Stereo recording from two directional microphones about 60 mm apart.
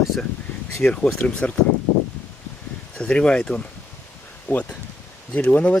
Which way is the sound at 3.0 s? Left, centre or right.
Centre.